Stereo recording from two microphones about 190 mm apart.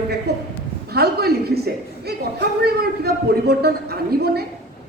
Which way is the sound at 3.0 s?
55° right (ahead or behind).